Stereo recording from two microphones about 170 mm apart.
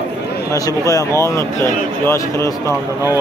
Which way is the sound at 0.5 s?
20° left (ahead or behind).